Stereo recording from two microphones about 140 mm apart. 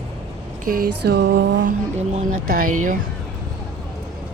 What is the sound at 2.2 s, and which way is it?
Speech, 80° right.